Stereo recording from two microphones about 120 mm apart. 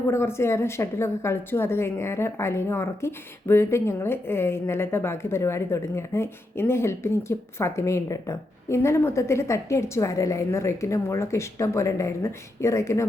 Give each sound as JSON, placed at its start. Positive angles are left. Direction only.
{"t": 0.1, "sound": "a woman's voice", "side_deg": 20}